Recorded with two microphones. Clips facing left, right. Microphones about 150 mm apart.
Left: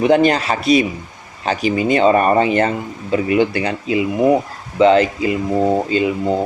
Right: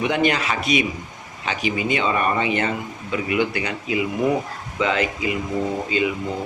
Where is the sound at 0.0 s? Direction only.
35° left (ahead or behind).